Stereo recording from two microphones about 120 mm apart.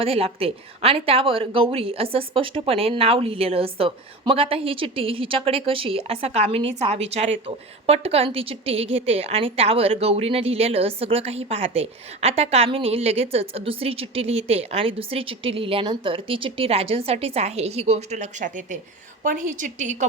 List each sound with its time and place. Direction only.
0.0 s a woman's voice: 55° right (ahead or behind); by 20.1 s 90° right